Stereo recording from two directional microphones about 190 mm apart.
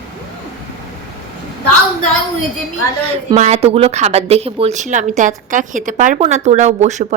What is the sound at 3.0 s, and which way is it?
Speech, 35° right (ahead or behind).